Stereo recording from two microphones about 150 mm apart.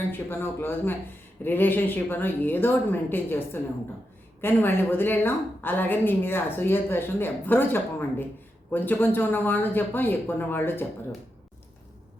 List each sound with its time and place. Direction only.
0.1 s a woman's voice: 15° left (ahead or behind)